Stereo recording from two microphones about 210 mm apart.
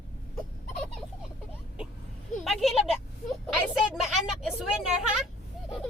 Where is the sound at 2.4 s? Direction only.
Centre (ahead or behind).